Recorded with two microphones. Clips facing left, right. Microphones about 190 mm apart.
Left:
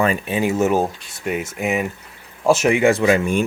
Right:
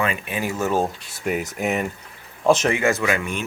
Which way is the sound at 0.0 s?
40° left (ahead or behind).